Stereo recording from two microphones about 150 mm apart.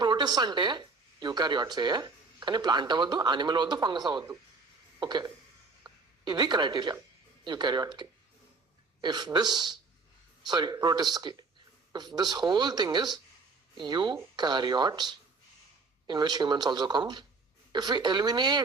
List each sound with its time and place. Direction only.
0.0 s speech: 30° right (ahead or behind)
4.9 s a sound: 30° right (ahead or behind)
5.8 s speech: 30° right (ahead or behind)